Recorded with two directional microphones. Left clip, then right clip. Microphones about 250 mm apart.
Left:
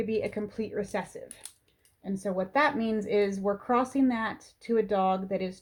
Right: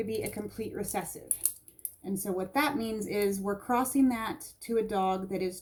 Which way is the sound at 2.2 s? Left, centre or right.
Left.